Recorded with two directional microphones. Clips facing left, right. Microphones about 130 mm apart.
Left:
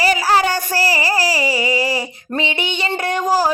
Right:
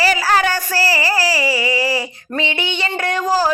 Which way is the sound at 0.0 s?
20° left (ahead or behind).